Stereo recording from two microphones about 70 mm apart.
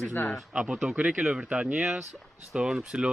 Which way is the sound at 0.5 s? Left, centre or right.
Centre.